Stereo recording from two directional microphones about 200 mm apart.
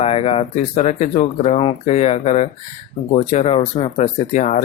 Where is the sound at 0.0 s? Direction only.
30° left (ahead or behind).